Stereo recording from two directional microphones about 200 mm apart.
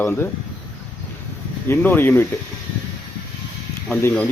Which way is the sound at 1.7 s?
10° left (ahead or behind).